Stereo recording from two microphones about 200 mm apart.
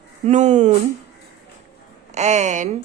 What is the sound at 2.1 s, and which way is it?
Speech, 35° right (ahead or behind).